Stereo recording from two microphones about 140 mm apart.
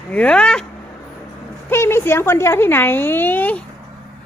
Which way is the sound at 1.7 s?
20° left (ahead or behind).